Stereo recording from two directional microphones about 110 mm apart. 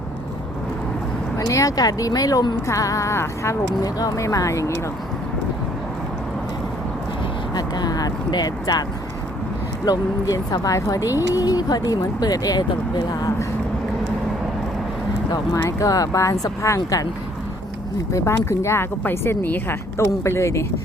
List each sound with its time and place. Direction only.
1.4 s speech: 30° left (ahead or behind)
7.5 s speech: 35° left (ahead or behind)
9.8 s speech: 35° left (ahead or behind)
15.3 s speech: 30° left (ahead or behind)
18.1 s speech: 25° left (ahead or behind)